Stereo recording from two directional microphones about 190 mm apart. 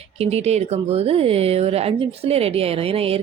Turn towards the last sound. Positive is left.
turn(degrees=-30)  # may be behind; listen again after turning